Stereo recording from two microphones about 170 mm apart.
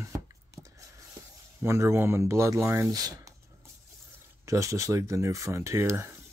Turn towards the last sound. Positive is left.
turn(degrees=-15)  # may be behind; listen again after turning